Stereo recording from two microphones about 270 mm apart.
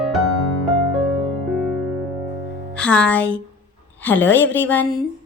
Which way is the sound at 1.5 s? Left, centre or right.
Centre.